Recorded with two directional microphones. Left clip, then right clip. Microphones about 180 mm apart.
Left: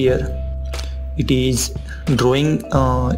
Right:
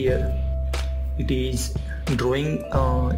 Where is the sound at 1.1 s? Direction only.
25° left (ahead or behind).